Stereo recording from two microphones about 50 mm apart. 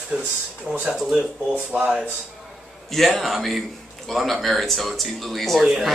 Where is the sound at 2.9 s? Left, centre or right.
Centre.